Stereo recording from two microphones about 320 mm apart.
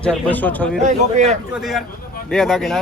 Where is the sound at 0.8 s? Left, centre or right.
Right.